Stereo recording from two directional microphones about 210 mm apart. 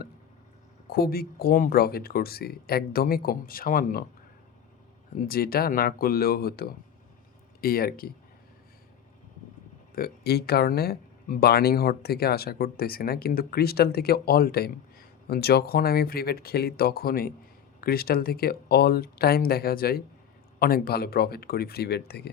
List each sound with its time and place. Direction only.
0.9 s speech: 45° left (ahead or behind)
5.1 s speech: 45° left (ahead or behind)
9.9 s speech: 45° left (ahead or behind)